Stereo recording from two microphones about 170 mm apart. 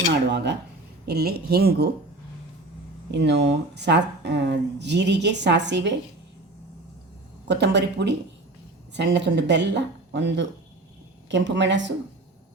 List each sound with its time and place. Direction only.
0.1 s dishes: 90° right
1.0 s speech: 70° right (ahead or behind)
3.1 s speech: 90° right
7.4 s speech: 90° right